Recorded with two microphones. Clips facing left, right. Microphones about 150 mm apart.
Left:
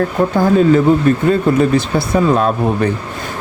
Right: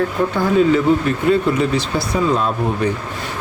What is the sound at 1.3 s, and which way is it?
Speech, 50° left (ahead or behind).